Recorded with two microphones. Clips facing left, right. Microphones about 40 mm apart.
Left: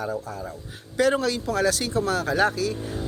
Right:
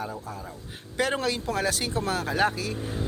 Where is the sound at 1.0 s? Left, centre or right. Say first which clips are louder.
Left 5 dB; right.